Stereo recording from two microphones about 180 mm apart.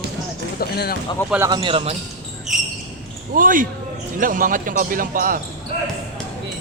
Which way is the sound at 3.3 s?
50° right (ahead or behind).